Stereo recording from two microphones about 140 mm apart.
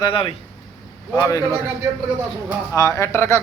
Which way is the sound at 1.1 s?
25° left (ahead or behind).